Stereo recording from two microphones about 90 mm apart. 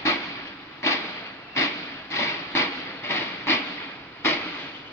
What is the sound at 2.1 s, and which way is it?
Train, 30° left (ahead or behind).